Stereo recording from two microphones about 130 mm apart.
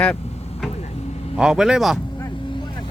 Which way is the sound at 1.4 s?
5° right (ahead or behind).